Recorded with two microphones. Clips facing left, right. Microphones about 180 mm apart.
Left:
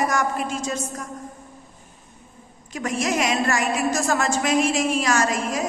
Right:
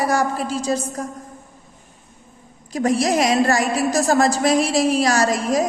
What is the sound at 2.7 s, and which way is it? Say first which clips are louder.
A woman's voice: right 6 dB; 35° right (ahead or behind).